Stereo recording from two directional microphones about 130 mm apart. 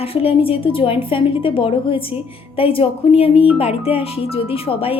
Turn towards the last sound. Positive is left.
turn(degrees=45)  # may be behind; listen again after turning